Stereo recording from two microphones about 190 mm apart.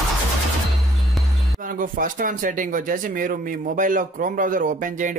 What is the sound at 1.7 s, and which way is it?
Speech, 45° right (ahead or behind).